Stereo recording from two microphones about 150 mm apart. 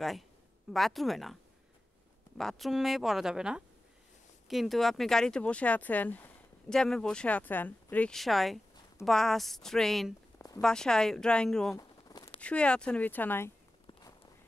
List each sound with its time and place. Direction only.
0.7 s speech: centre (ahead or behind)
11.7 s a sound: 25° left (ahead or behind)
12.4 s speech: 10° left (ahead or behind)